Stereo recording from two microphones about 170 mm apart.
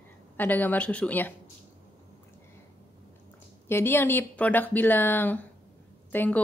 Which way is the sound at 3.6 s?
15° left (ahead or behind).